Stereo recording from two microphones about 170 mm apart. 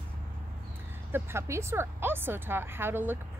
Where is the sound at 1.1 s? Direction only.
15° right (ahead or behind).